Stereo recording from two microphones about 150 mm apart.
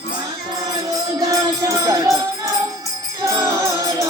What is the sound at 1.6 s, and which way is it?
Music, 20° right (ahead or behind).